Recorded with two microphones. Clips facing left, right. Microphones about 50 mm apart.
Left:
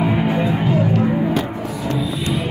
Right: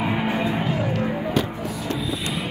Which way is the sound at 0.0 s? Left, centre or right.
Centre.